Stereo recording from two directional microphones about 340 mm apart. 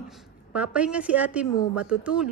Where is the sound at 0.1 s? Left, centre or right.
Centre.